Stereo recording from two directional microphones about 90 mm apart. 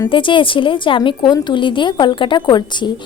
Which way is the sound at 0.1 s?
70° left (ahead or behind).